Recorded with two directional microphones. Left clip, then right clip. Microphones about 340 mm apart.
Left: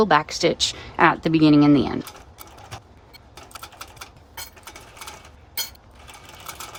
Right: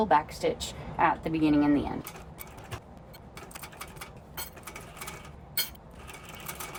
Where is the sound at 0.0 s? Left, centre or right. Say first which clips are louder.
Left 7 dB; left.